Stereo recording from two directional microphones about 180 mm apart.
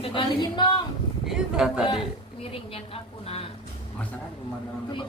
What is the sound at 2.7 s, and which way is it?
Speech, 35° left (ahead or behind).